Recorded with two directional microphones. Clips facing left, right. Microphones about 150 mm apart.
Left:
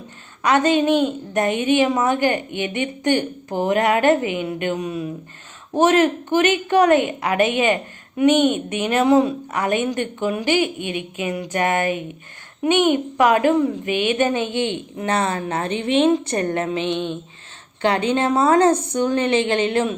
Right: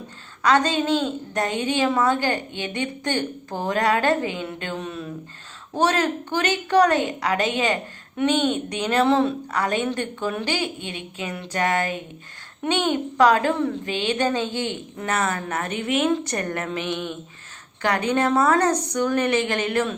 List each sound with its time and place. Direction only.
0.4 s a woman's voice: 15° left (ahead or behind)